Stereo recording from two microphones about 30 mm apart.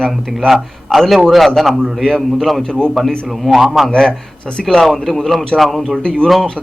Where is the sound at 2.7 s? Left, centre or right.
Left.